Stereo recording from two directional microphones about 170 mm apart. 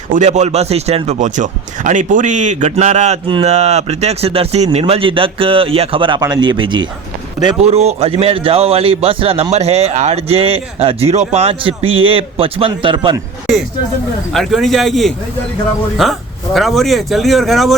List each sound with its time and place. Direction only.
0.1 s a man's voice: 45° right (ahead or behind); by 6.8 s 25° right (ahead or behind)
7.6 s a man's voice: 40° right (ahead or behind)
14.3 s speech: centre (ahead or behind)
16.6 s speech: centre (ahead or behind)